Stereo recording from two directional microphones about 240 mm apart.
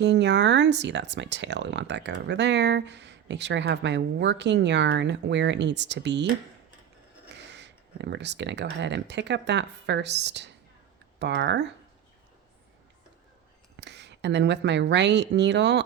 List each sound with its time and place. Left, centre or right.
0.0 s speech: right
7.3 s speech: right
13.7 s speech: right